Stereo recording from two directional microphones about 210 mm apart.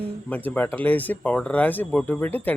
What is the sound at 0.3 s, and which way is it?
A man's voice, 5° left (ahead or behind).